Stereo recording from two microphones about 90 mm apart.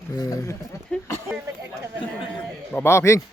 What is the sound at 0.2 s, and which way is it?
Speech, 40° left (ahead or behind).